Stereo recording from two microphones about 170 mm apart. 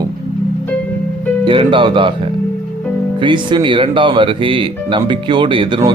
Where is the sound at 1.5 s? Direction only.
30° right (ahead or behind).